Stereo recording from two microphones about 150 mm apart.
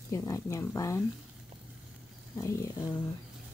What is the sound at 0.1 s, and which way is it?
Speech, 20° left (ahead or behind).